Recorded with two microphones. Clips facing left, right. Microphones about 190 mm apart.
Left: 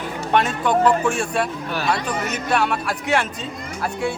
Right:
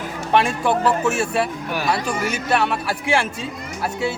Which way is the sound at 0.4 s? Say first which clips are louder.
Left 1 dB; 5° right (ahead or behind).